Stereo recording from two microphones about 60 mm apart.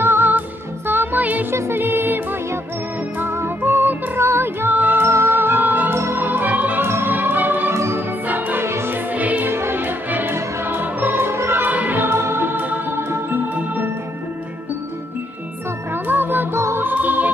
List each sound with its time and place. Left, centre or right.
0.0 s music: right
1.5 s music: right
5.1 s music: right
5.9 s music: right
6.2 s organ: right
6.8 s music: right
7.7 s music: right
8.3 s music: right
8.6 s music: right
8.9 s music: right
9.5 s music: right
11.6 s music: right
12.0 s music: right
15.9 s music: right